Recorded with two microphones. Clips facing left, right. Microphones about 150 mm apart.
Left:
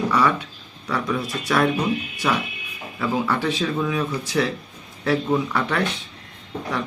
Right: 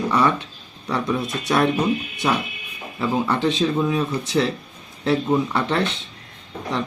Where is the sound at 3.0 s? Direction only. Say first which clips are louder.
Right 2 dB; 20° right (ahead or behind).